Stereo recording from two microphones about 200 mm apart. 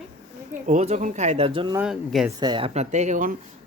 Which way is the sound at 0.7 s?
35° right (ahead or behind).